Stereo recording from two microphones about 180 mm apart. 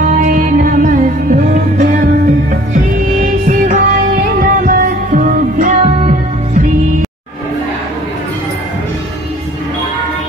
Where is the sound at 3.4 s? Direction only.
45° right (ahead or behind).